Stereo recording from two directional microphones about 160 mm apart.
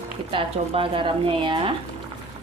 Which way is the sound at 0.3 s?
35° right (ahead or behind).